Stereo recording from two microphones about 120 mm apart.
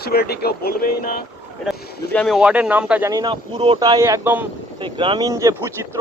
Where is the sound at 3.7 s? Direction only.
35° right (ahead or behind); by 4.5 s 15° right (ahead or behind).